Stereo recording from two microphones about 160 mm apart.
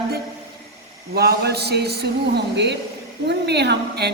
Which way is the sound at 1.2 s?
90° right.